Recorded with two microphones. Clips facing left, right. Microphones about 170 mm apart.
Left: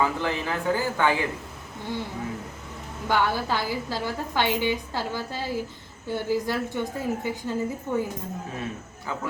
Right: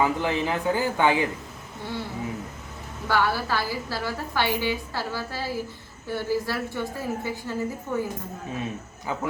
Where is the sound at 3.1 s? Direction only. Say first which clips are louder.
Even; 20° left (ahead or behind).